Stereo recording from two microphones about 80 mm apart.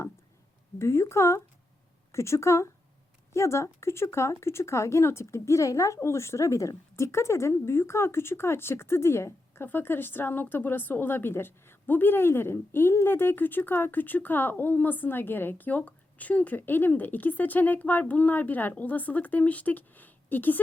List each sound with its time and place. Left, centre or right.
0.8 s a woman's voice: left